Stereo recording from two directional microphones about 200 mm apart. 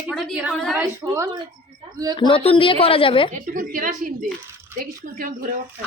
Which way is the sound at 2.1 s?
25° left (ahead or behind).